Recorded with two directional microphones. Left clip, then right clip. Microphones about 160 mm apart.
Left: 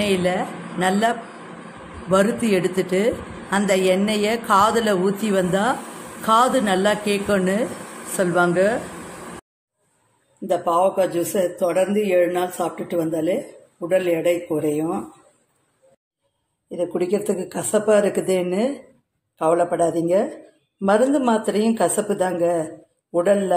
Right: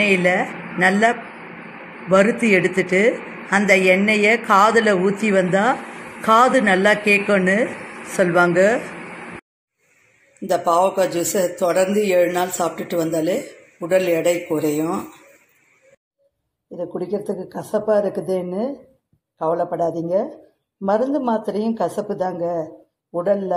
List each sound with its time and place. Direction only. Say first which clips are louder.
0.1 s a woman's voice: right 4 dB; 20° right (ahead or behind)
10.5 s speech: right 2 dB; 20° right (ahead or behind)
16.7 s a woman's voice: left 3 dB; centre (ahead or behind)